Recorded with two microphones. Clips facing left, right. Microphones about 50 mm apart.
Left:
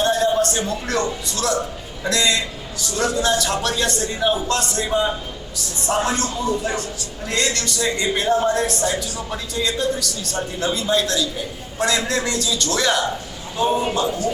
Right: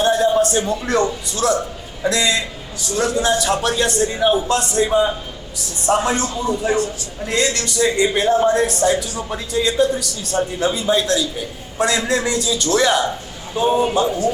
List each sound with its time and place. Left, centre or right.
0.0 s music: centre
0.7 s speech: centre
4.9 s a man's voice: centre
5.8 s a man's voice: right